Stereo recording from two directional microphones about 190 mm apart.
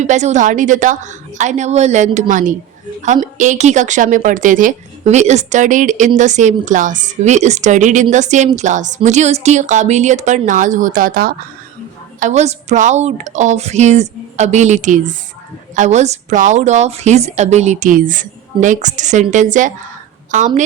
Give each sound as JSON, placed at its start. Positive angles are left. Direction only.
{"t": 0.0, "sound": "a woman's voice", "side_deg": -35}
{"t": 12.2, "sound": "a woman's voice", "side_deg": -35}